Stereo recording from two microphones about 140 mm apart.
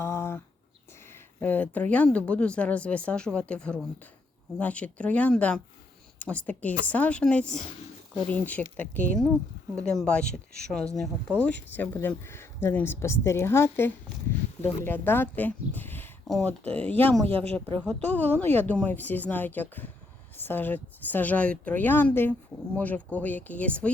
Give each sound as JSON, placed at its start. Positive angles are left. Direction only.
{"t": 0.0, "sound": "a sound", "side_deg": 20}
{"t": 1.4, "sound": "speech", "side_deg": 10}
{"t": 17.2, "sound": "speech", "side_deg": -45}
{"t": 17.5, "sound": "speech", "side_deg": 10}